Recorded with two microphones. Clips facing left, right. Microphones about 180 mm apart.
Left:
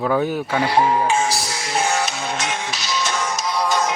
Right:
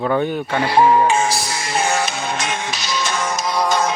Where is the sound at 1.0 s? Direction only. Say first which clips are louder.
Right 2 dB; centre (ahead or behind).